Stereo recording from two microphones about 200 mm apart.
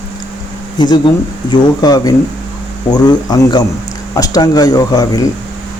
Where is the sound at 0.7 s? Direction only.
20° left (ahead or behind).